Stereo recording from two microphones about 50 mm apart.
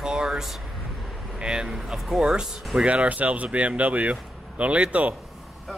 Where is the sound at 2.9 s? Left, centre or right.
Right.